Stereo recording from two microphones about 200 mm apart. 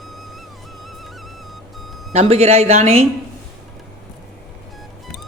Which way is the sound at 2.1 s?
30° right (ahead or behind).